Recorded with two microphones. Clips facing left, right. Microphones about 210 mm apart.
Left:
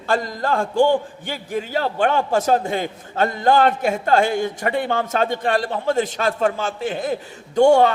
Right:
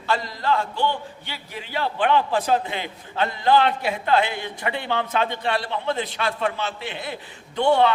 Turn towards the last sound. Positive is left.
turn(degrees=45)  # may be behind; listen again after turning